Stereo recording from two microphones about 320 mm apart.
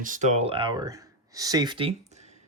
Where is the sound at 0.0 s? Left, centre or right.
Right.